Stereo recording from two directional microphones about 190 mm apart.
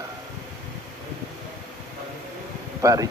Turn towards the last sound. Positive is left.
turn(degrees=-15)  # may be behind; listen again after turning